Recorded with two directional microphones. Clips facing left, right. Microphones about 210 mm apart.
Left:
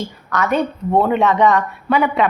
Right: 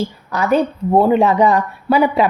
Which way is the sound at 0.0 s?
30° right (ahead or behind).